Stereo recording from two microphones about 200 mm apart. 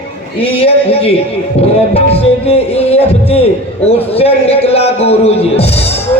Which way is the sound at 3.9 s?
30° left (ahead or behind).